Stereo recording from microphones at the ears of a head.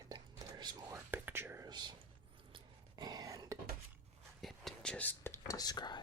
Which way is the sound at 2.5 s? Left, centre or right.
Right.